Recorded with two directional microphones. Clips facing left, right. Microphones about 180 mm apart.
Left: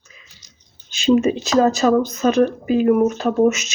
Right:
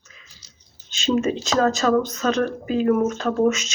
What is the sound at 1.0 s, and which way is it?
Speech, 15° left (ahead or behind).